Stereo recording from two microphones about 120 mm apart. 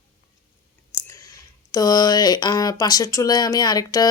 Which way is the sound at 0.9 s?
25° left (ahead or behind).